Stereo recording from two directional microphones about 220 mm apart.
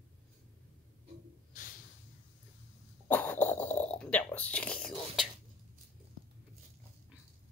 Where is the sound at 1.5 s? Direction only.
40° left (ahead or behind).